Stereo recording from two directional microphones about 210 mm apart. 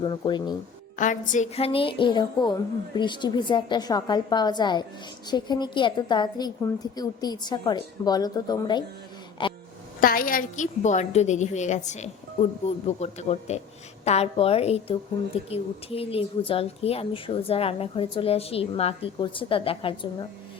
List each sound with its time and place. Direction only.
0.0 s a woman's voice: 20° left (ahead or behind)
0.9 s a woman's voice: 35° left (ahead or behind); by 8.8 s 20° left (ahead or behind)
9.4 s a sound: 25° left (ahead or behind)
10.0 s a woman's voice: 45° left (ahead or behind); by 20.2 s 25° left (ahead or behind)